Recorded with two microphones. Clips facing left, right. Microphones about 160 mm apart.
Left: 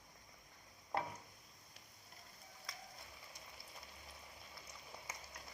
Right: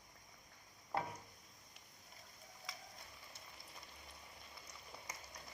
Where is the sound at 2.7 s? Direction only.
Centre (ahead or behind).